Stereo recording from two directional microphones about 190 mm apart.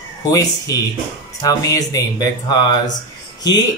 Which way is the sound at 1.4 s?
20° left (ahead or behind).